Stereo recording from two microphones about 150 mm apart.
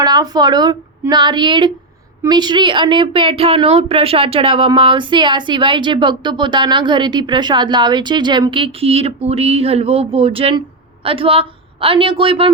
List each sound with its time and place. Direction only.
0.0 s a woman's voice: 25° right (ahead or behind)